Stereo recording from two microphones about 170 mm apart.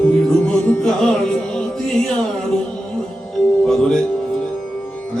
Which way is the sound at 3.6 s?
Centre (ahead or behind).